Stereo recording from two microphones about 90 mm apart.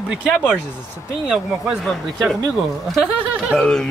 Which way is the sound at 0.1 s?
10° right (ahead or behind).